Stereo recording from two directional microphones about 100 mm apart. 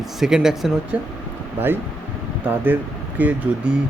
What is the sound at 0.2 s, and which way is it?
Speech, 5° right (ahead or behind).